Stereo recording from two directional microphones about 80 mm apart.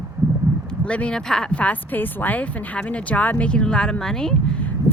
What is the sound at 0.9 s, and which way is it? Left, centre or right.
Speech, centre.